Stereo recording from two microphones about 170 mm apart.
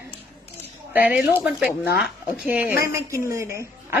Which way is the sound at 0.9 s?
10° right (ahead or behind).